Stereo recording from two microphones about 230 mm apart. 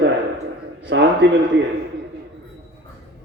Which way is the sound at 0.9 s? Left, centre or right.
Right.